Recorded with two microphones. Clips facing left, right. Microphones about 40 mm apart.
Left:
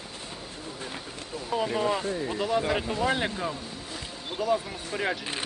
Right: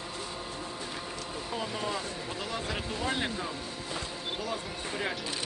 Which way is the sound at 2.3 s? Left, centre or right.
Centre.